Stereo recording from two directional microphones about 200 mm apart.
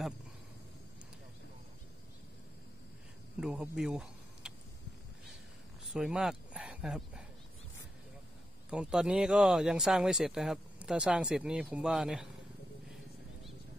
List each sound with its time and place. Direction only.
3.3 s a sound: 5° right (ahead or behind)
5.9 s speech: 5° right (ahead or behind)
8.6 s speech: 5° right (ahead or behind)